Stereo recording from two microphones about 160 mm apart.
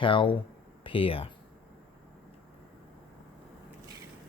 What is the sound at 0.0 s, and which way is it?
Speech, 30° left (ahead or behind).